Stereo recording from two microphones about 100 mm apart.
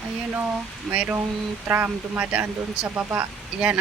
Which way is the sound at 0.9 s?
10° right (ahead or behind).